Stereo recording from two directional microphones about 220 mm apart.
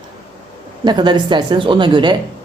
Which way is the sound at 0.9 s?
20° right (ahead or behind).